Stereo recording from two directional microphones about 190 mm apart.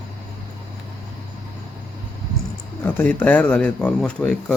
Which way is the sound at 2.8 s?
10° left (ahead or behind).